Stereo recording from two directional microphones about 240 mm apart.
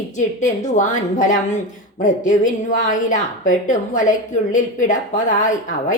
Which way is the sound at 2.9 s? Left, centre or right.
Left.